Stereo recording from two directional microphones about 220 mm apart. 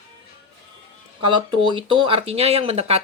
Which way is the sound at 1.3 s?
20° right (ahead or behind).